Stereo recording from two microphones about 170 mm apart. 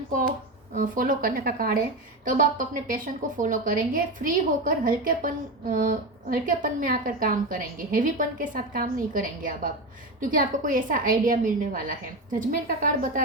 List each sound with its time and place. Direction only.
0.7 s a woman's voice: 50° right (ahead or behind)